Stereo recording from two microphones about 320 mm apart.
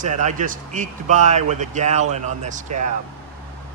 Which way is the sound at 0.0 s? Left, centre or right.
Right.